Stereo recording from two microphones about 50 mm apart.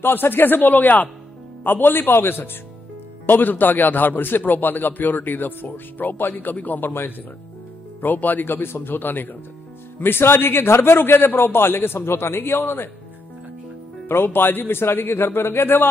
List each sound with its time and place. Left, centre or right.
0.0 s a man's voice: left
6.9 s a man's voice: left
8.0 s a man's voice: left
14.0 s a man's voice: left